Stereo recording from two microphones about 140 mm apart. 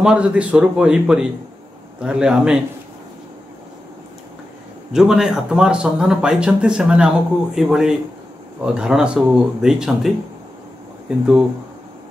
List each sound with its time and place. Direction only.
0.0 s a man's voice: 5° right (ahead or behind)
4.9 s speech: 5° right (ahead or behind)